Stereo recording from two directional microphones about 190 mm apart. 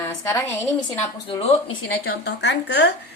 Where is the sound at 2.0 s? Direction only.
55° left (ahead or behind).